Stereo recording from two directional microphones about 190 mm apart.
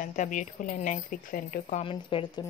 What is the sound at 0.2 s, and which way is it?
Speech, 40° left (ahead or behind).